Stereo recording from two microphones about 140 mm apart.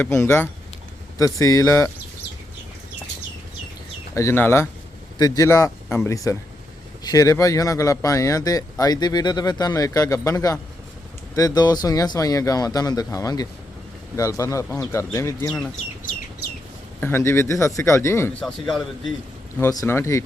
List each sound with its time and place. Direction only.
0.0 s speech: 20° left (ahead or behind)
4.1 s speech: 20° left (ahead or behind)
5.1 s speech: 30° left (ahead or behind)
17.0 s speech: 15° left (ahead or behind)
19.5 s speech: 15° left (ahead or behind)